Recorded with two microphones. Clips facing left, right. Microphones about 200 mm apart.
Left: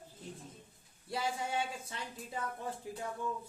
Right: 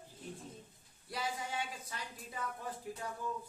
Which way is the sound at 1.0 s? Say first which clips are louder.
Left 4 dB; 25° left (ahead or behind).